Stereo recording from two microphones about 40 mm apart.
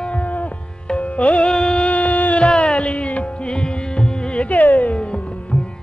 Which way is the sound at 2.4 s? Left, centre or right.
Centre.